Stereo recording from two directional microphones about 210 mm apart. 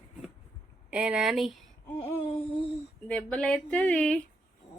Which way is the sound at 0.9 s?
5° right (ahead or behind).